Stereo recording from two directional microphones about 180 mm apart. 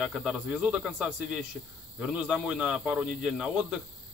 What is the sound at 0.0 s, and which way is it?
Speech, 5° right (ahead or behind).